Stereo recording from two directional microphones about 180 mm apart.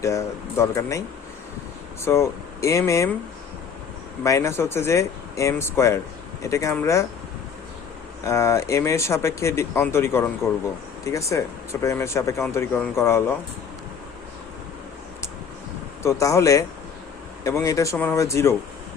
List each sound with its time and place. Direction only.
0.0 s speech: 15° left (ahead or behind)
2.0 s speech: 15° left (ahead or behind)
4.2 s speech: 15° left (ahead or behind)
8.2 s speech: 15° left (ahead or behind)
16.0 s speech: 15° left (ahead or behind)